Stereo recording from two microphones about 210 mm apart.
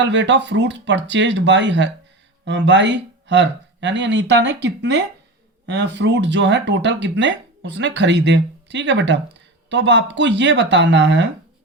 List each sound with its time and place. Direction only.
0.0 s speech: 60° right (ahead or behind)